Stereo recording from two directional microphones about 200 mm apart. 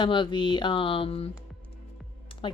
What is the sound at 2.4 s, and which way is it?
Speech, 25° left (ahead or behind).